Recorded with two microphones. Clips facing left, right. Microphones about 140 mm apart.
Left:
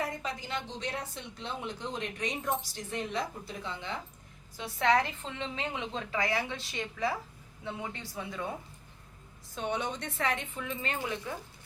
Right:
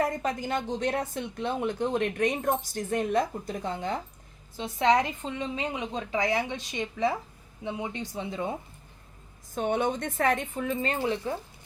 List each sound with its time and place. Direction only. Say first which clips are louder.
0.0 s speech: right 8 dB; 50° right (ahead or behind)
4.5 s a woman's voice: right 4 dB; 20° right (ahead or behind)
9.6 s speech: right 7 dB; 50° right (ahead or behind); by 11.3 s 35° right (ahead or behind)